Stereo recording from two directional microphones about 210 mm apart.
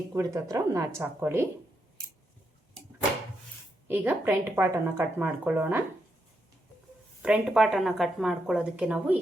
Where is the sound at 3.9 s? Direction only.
10° right (ahead or behind).